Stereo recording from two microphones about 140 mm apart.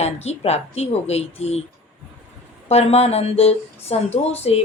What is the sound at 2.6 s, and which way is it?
Speech, 50° left (ahead or behind).